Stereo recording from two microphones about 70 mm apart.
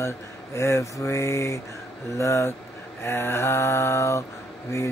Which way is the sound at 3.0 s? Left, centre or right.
Left.